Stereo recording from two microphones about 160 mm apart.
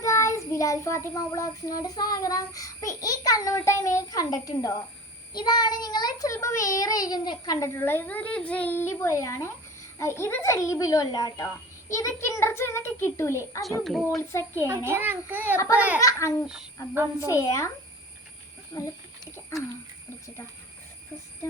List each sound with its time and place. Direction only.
0.0 s child singing: 20° left (ahead or behind)
11.9 s a child's voice: 20° left (ahead or behind)
14.8 s a child's voice: 15° right (ahead or behind)
16.0 s a child's voice: 20° left (ahead or behind)
17.2 s child singing: 20° left (ahead or behind)
18.7 s a sound: 20° left (ahead or behind)